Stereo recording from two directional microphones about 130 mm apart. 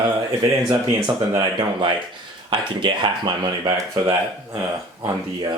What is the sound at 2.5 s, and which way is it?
Speech, 35° right (ahead or behind).